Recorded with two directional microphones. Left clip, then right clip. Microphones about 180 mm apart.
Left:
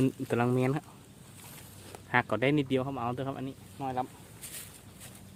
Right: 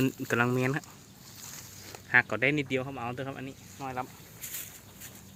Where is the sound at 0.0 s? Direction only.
Centre (ahead or behind).